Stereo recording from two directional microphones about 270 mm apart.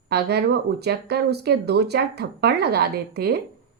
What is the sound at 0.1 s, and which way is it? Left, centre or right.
A woman's voice, right.